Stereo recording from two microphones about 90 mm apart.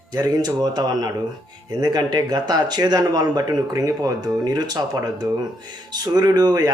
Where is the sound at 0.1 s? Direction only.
45° right (ahead or behind).